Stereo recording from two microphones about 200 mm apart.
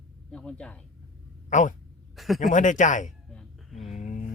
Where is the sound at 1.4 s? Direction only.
40° left (ahead or behind).